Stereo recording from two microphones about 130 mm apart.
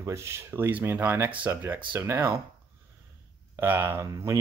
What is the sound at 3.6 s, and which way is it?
Speech, 20° right (ahead or behind).